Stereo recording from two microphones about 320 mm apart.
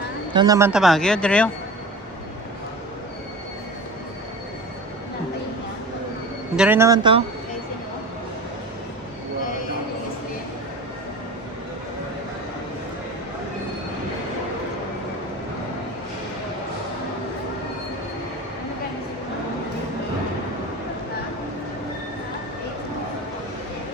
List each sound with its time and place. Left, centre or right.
0.3 s speech: centre
6.6 s speech: centre